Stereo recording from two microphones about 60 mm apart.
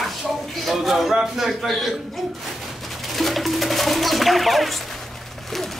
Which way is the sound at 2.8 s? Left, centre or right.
Centre.